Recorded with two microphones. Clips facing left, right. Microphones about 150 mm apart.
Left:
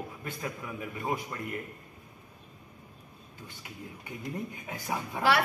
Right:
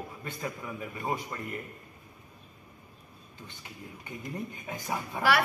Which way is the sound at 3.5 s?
10° left (ahead or behind).